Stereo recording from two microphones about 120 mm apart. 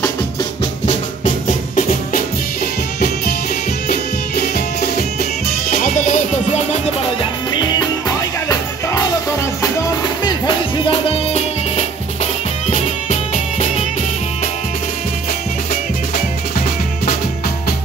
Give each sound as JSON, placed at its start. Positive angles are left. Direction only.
{"t": 5.7, "sound": "music", "side_deg": 90}
{"t": 7.2, "sound": "music", "side_deg": 40}
{"t": 8.5, "sound": "music", "side_deg": 30}
{"t": 10.9, "sound": "music", "side_deg": 50}
{"t": 12.6, "sound": "music", "side_deg": 70}